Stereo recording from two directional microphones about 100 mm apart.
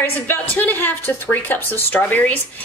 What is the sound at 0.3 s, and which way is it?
Speech, 20° left (ahead or behind).